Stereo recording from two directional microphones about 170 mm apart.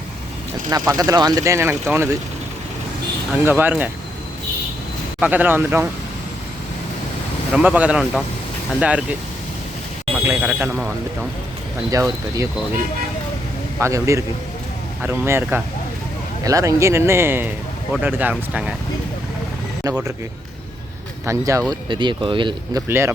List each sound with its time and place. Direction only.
0.7 s speech: 20° right (ahead or behind)
3.4 s speech: 10° right (ahead or behind)
5.2 s speech: 10° right (ahead or behind)
7.5 s speech: 5° right (ahead or behind)
10.2 s speech: 15° right (ahead or behind)
10.6 s speech: centre (ahead or behind)
11.9 s speech: 20° right (ahead or behind)
21.2 s speech: 20° right (ahead or behind)
22.9 s speech: 15° right (ahead or behind)